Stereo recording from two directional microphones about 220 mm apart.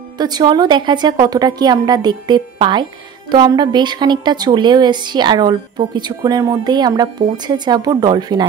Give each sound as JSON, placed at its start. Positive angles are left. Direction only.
{"t": 0.2, "sound": "a woman's voice", "side_deg": -20}